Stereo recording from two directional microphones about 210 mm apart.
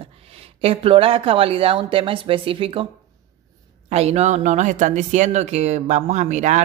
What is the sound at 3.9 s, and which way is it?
Speech, 30° right (ahead or behind).